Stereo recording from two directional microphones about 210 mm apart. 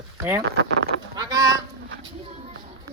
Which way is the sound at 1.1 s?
20° right (ahead or behind).